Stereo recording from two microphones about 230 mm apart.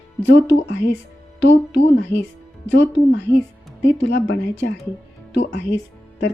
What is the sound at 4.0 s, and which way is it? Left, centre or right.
Speech, left.